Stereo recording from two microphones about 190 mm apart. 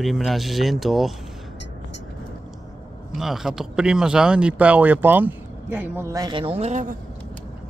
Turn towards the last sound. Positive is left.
turn(degrees=-40)  # may be behind; listen again after turning